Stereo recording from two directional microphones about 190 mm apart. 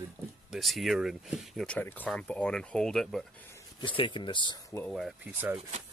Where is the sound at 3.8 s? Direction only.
25° left (ahead or behind).